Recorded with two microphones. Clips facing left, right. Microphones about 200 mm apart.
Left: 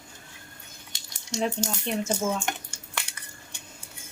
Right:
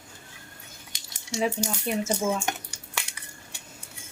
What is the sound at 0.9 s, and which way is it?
Cutlery, 15° right (ahead or behind).